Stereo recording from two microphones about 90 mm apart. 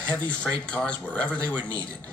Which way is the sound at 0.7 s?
15° left (ahead or behind).